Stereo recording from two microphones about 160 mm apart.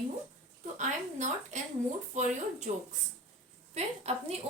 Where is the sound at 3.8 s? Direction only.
45° right (ahead or behind).